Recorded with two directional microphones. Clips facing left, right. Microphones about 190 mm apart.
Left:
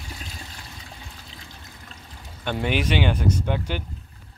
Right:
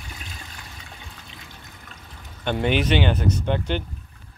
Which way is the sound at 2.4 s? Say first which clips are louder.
Right 3 dB; 10° left (ahead or behind).